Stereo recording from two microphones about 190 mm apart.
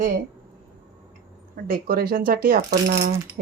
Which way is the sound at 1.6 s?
50° right (ahead or behind).